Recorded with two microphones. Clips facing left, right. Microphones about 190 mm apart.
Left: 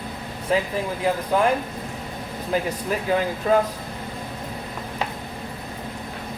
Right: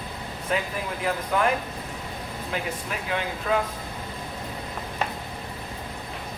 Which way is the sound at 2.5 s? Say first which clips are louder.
Left 7 dB; 40° left (ahead or behind).